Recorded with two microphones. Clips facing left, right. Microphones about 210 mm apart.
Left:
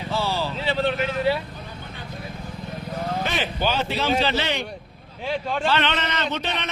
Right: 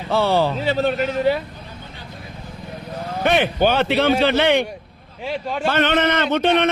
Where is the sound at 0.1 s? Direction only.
60° right (ahead or behind).